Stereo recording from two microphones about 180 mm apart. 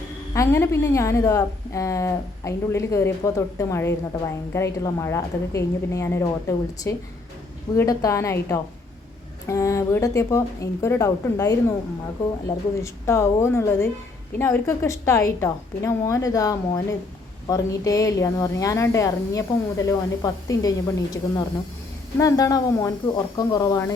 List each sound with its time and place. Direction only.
0.3 s a woman's voice: 15° left (ahead or behind)